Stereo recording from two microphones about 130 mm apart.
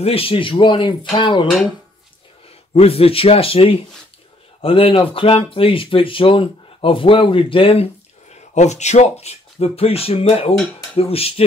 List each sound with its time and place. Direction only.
0.0 s speech: 45° left (ahead or behind)
2.7 s speech: 50° left (ahead or behind)